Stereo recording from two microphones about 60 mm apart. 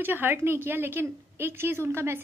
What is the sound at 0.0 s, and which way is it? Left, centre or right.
A woman's voice, right.